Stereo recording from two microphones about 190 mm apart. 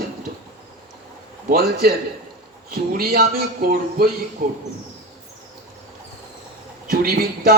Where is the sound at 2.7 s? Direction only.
50° right (ahead or behind).